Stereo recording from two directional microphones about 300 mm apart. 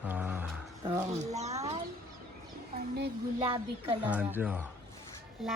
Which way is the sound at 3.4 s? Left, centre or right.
Centre.